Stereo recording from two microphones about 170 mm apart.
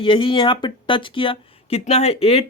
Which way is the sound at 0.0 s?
30° left (ahead or behind).